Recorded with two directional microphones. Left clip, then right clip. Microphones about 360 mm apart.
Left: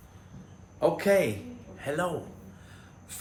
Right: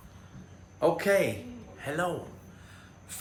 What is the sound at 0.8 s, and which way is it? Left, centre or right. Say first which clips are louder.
A man's voice: left 1 dB; centre.